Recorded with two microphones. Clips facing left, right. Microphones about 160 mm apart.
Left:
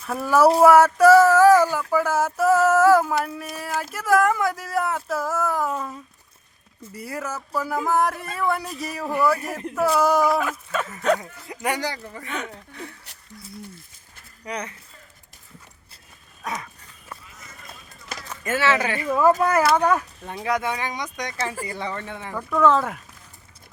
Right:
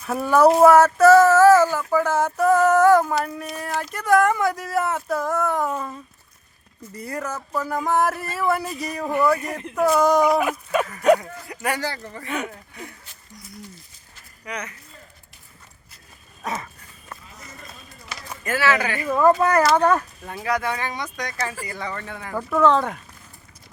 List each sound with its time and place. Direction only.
0.0 s speech: centre (ahead or behind)
1.9 s a sound: 10° left (ahead or behind)
3.9 s speech: centre (ahead or behind)
10.2 s speech: 20° right (ahead or behind)
11.2 s speech: 20° left (ahead or behind)
11.9 s speech: 5° left (ahead or behind)
12.2 s speech: 10° right (ahead or behind)
14.4 s speech: 30° left (ahead or behind)
16.4 s dog: centre (ahead or behind)
18.4 s speech: 25° left (ahead or behind)
19.0 s speech: centre (ahead or behind)
20.2 s speech: 20° left (ahead or behind)
22.4 s speech: 5° right (ahead or behind)